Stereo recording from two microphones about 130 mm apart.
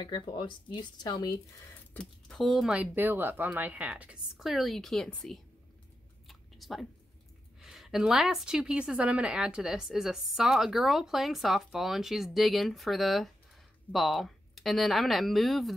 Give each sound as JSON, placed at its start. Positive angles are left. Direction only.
{"t": 0.0, "sound": "speech", "side_deg": 35}
{"t": 2.0, "sound": "a woman's voice", "side_deg": 5}
{"t": 6.2, "sound": "a sound", "side_deg": 0}
{"t": 7.6, "sound": "a woman's voice", "side_deg": -5}